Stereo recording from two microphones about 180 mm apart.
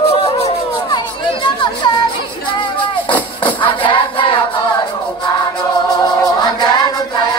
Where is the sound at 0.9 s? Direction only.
25° left (ahead or behind).